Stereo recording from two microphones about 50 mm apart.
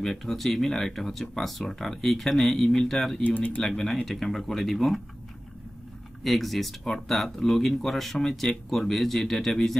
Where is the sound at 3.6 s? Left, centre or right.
Centre.